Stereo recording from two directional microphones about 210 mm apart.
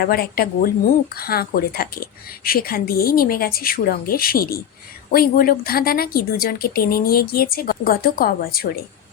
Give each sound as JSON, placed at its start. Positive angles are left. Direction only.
{"t": 0.0, "sound": "a woman's voice", "side_deg": 45}